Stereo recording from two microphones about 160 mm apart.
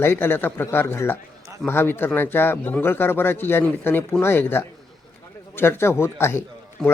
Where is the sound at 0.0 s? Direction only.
15° left (ahead or behind).